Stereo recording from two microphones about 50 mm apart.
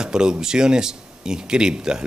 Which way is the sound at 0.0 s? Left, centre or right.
Centre.